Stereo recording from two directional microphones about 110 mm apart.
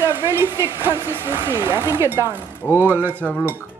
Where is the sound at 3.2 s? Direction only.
5° left (ahead or behind).